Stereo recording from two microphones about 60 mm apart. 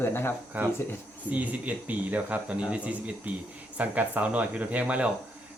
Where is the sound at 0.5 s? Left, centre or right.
Right.